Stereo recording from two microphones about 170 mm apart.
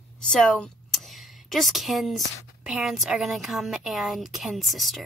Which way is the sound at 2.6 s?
Centre (ahead or behind).